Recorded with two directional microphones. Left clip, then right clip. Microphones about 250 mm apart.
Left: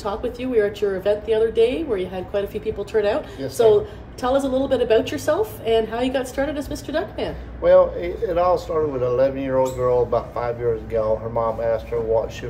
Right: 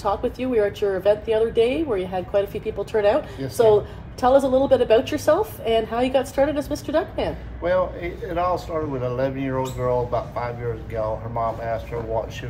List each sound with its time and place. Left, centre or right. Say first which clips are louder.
0.0 s a woman's voice: right 2 dB; right
7.6 s speech: left 7 dB; centre